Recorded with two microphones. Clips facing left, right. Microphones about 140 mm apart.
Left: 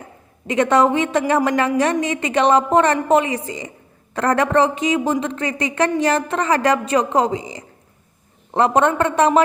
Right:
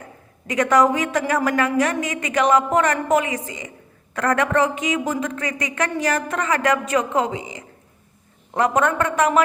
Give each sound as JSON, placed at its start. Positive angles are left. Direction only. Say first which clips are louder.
{"t": 0.4, "sound": "a woman's voice", "louder": "left 2 dB", "side_deg": 25}